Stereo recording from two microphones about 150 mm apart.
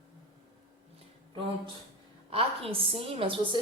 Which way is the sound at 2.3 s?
40° right (ahead or behind).